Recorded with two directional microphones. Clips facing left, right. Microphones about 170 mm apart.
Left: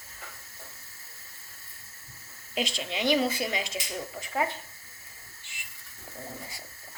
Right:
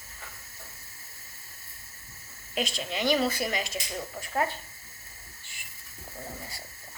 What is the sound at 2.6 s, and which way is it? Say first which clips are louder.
Speech: even; 20° left (ahead or behind).